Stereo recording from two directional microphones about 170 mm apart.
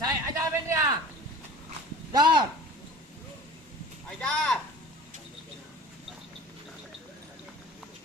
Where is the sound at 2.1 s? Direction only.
25° right (ahead or behind).